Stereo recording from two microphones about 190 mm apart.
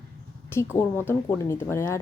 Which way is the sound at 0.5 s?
10° left (ahead or behind).